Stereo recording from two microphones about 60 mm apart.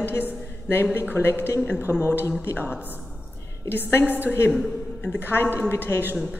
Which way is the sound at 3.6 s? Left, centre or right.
Left.